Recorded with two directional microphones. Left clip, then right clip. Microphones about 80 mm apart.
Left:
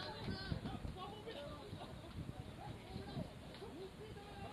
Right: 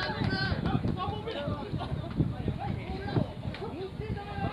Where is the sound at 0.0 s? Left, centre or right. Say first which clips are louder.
Right 16 dB; centre.